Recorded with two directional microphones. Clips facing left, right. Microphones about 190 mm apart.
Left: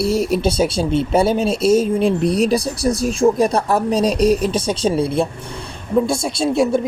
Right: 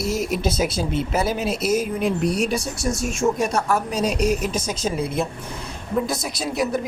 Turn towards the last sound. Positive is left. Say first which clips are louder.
# left 7 dB
turn(degrees=25)  # may be behind; listen again after turning